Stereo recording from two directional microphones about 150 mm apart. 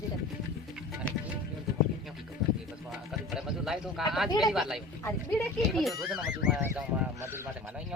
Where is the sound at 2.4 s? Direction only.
Centre (ahead or behind).